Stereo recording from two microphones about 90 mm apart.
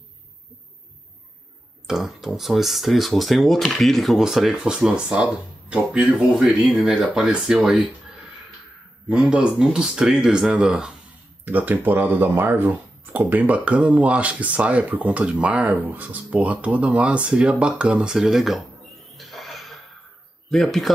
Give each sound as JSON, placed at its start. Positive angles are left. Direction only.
{"t": 1.9, "sound": "speech", "side_deg": -5}
{"t": 9.1, "sound": "speech", "side_deg": -10}
{"t": 19.1, "sound": "music", "side_deg": 0}
{"t": 20.5, "sound": "speech", "side_deg": 0}